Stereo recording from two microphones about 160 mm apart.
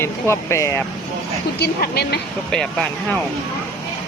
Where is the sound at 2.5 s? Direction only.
5° left (ahead or behind).